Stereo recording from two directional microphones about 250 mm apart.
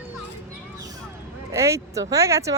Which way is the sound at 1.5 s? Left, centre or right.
Centre.